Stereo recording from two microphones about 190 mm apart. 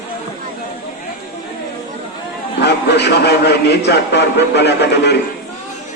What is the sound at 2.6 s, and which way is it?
A man's voice, 65° left (ahead or behind).